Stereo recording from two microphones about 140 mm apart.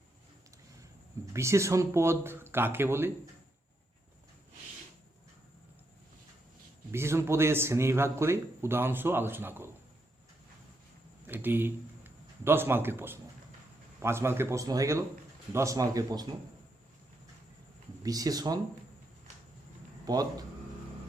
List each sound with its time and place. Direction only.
1.3 s speech: 20° right (ahead or behind)
6.9 s speech: 20° right (ahead or behind)
11.3 s a man's voice: 15° right (ahead or behind)
18.0 s speech: 25° right (ahead or behind)
20.1 s speech: 25° right (ahead or behind)